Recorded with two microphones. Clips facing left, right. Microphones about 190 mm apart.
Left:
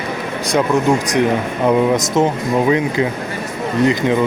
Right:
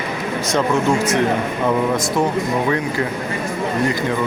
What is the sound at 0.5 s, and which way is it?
Speech, 15° left (ahead or behind).